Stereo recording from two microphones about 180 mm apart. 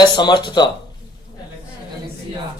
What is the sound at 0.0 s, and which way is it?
Speech, 25° left (ahead or behind).